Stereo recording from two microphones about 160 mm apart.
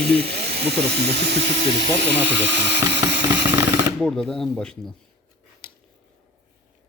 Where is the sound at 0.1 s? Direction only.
90° right.